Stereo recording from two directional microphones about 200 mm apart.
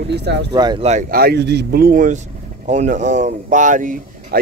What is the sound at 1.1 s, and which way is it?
Speech, 55° right (ahead or behind).